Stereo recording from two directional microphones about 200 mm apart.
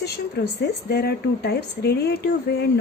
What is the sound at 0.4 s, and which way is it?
Speech, 55° left (ahead or behind).